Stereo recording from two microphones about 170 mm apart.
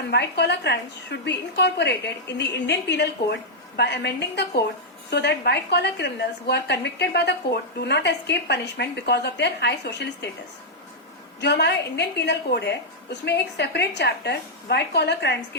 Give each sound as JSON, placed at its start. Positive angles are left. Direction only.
{"t": 0.1, "sound": "a woman's voice", "side_deg": 85}
{"t": 11.3, "sound": "a woman's voice", "side_deg": 85}